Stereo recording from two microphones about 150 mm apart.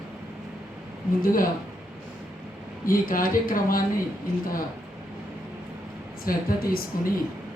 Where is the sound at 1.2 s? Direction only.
70° left (ahead or behind).